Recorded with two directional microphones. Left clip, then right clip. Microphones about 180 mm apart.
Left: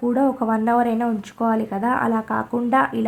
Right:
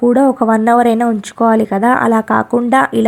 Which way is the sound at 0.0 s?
35° right (ahead or behind).